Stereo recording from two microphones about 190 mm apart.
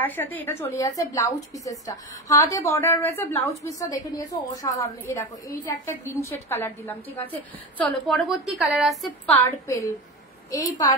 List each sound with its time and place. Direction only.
0.0 s a woman's voice: 10° left (ahead or behind)
9.4 s a woman's voice: 15° left (ahead or behind)